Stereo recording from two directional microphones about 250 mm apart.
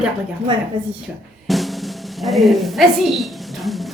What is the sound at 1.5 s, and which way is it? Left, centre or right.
Drum, centre.